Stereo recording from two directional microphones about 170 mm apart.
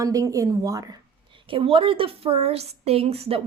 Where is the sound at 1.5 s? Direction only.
30° right (ahead or behind).